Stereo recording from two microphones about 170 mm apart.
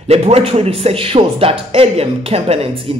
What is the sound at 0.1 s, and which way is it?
Speech, 35° right (ahead or behind).